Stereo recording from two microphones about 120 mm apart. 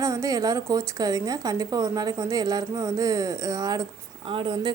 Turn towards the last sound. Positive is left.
turn(degrees=-40)  # may be behind; listen again after turning